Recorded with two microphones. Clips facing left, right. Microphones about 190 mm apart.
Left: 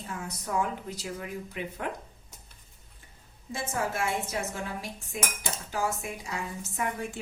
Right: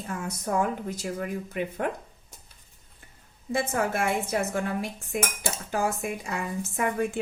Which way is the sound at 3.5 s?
55° right (ahead or behind).